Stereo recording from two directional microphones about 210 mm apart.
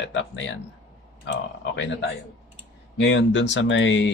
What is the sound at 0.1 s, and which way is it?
Speech, 60° left (ahead or behind).